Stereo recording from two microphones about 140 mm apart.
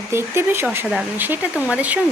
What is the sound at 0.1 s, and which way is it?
Speech, 15° right (ahead or behind).